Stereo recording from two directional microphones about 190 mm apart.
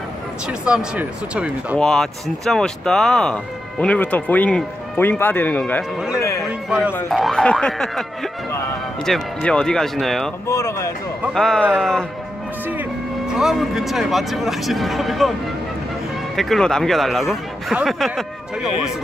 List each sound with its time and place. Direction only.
0.5 s speech: 5° right (ahead or behind)
6.1 s music: 15° left (ahead or behind)
7.1 s speech: centre (ahead or behind)
10.4 s speech: 15° left (ahead or behind)
11.2 s speech: centre (ahead or behind)
13.4 s speech: centre (ahead or behind)
16.3 s speech: centre (ahead or behind)